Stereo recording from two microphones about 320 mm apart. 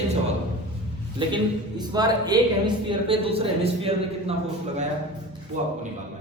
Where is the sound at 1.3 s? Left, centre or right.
Centre.